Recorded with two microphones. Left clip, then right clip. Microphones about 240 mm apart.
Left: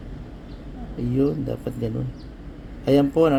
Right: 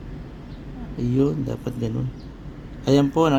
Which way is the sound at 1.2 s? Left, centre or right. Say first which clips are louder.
Even; centre.